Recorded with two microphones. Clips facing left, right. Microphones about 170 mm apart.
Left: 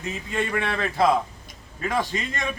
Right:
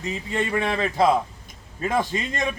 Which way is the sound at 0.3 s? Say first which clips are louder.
Right 2 dB; 20° right (ahead or behind).